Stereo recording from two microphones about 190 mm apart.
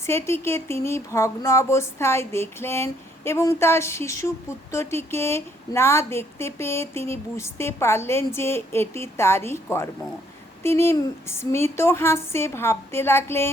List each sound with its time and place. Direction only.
0.0 s speech: 15° left (ahead or behind)